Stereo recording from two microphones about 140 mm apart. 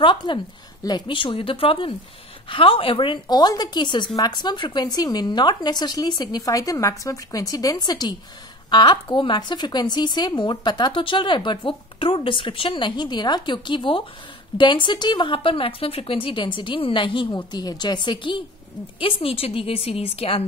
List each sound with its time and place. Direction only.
0.0 s a woman's voice: 35° left (ahead or behind)